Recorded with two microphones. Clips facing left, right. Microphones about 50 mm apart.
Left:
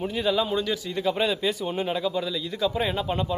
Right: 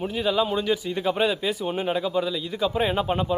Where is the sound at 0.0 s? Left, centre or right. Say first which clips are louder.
Right 1 dB; centre.